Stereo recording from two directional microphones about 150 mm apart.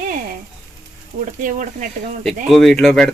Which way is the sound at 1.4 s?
60° right (ahead or behind).